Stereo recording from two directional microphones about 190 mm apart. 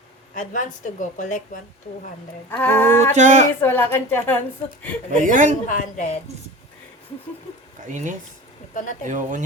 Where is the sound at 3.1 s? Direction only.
40° right (ahead or behind).